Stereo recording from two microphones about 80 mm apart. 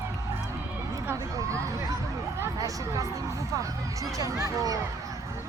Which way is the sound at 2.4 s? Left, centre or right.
Right.